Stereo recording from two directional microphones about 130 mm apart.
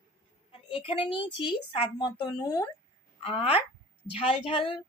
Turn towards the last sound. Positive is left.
turn(degrees=40)  # may be behind; listen again after turning